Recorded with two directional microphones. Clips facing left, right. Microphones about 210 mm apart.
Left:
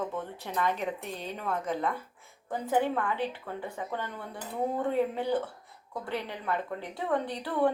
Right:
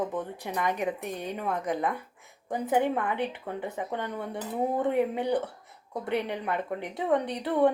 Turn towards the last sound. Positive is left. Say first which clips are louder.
# right 4 dB
turn(degrees=-20)  # may be behind; listen again after turning